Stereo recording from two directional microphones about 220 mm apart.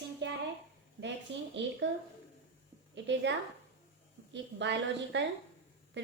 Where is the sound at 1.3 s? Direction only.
55° right (ahead or behind).